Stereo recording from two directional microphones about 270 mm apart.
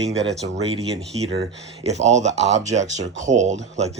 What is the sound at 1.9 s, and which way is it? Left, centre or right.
Speech, right.